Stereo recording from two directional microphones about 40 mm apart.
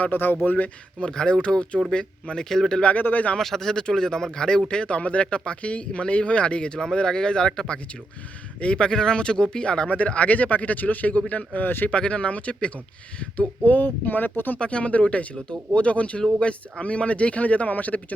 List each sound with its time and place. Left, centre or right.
0.0 s speech: left
0.4 s speech: left
0.9 s speech: left
2.5 s speech: centre
2.8 s speech: left
3.3 s speech: centre; by 11.7 s left
11.9 s speech: left
13.7 s speech: left
14.6 s speech: left